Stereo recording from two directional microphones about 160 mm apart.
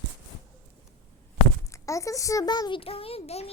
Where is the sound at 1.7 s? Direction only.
20° left (ahead or behind); by 3.5 s 40° left (ahead or behind).